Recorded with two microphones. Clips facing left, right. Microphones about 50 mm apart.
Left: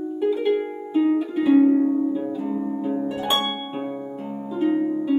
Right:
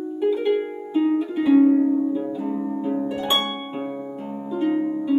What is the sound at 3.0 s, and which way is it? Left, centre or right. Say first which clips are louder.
Harp: even; centre.